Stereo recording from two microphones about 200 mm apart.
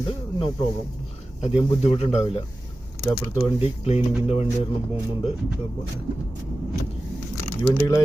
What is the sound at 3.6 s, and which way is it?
Speech, 30° left (ahead or behind).